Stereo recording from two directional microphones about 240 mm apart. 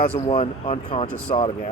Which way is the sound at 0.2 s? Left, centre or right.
Left.